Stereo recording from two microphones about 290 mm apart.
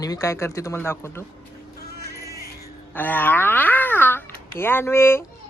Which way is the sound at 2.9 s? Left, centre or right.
Centre.